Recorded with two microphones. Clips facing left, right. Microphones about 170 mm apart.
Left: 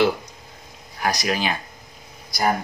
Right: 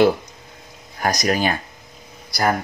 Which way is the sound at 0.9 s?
45° right (ahead or behind).